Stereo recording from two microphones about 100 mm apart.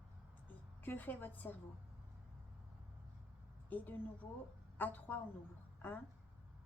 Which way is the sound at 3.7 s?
20° left (ahead or behind).